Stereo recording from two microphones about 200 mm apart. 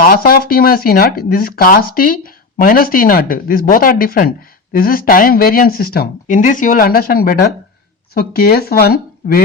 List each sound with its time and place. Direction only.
0.0 s speech: 50° left (ahead or behind)